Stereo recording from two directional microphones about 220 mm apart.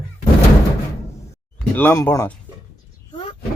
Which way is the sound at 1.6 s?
10° left (ahead or behind).